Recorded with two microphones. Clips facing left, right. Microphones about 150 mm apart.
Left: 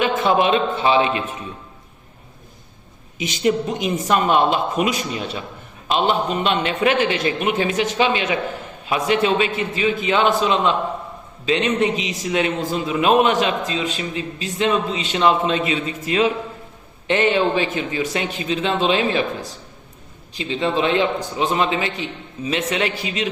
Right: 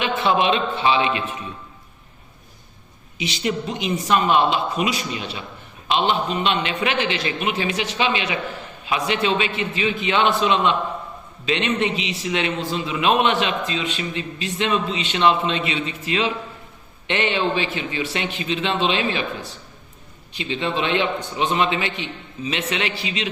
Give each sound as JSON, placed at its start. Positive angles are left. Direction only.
{"t": 0.0, "sound": "a man's voice", "side_deg": 45}
{"t": 3.2, "sound": "a man's voice", "side_deg": 45}